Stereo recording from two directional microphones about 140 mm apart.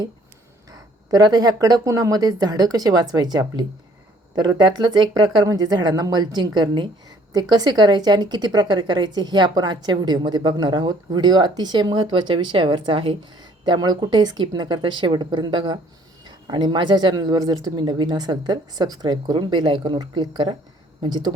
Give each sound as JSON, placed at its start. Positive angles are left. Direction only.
{"t": 0.7, "sound": "a woman's voice", "side_deg": -30}